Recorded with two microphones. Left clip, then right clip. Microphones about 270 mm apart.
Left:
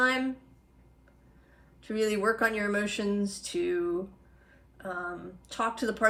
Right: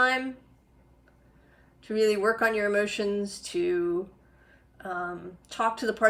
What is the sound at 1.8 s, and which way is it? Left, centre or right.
A woman's voice, centre.